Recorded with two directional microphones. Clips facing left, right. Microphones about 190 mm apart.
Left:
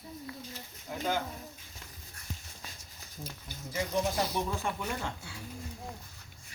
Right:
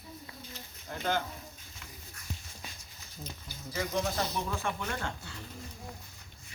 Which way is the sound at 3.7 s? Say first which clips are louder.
Left 1 dB; 10° left (ahead or behind).